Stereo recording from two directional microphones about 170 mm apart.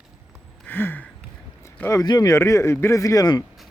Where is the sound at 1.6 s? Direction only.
15° left (ahead or behind).